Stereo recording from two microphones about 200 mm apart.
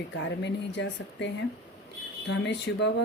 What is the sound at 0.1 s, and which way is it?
A woman's voice, 60° left (ahead or behind).